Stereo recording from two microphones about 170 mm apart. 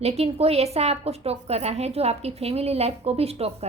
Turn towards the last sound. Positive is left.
turn(degrees=-35)  # may be behind; listen again after turning